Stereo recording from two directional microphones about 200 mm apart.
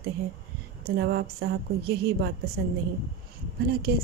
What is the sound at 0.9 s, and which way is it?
A woman's voice, 55° right (ahead or behind).